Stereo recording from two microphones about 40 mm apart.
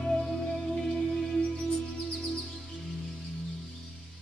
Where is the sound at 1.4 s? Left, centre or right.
Left.